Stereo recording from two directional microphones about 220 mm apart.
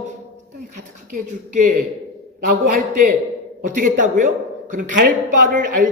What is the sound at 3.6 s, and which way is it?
A man's voice, 35° right (ahead or behind).